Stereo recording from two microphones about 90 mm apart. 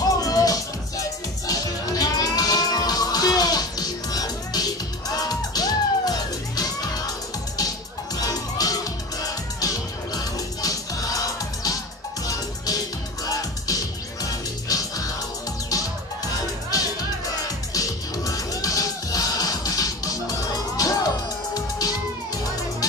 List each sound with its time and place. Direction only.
0.0 s music: 45° left (ahead or behind)
8.2 s music: 45° left (ahead or behind)
17.4 s music: 40° left (ahead or behind)